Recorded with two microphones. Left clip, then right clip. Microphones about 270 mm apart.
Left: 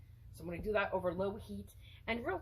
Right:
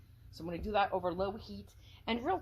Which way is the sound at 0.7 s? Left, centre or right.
Right.